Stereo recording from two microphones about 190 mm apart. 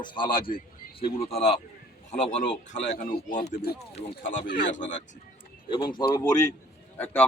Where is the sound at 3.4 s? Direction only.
55° left (ahead or behind).